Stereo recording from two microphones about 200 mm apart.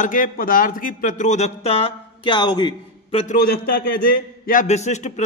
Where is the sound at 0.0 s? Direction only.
40° left (ahead or behind).